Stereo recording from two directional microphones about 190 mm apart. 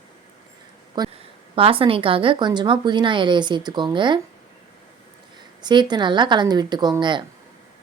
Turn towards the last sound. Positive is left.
turn(degrees=-25)  # may be behind; listen again after turning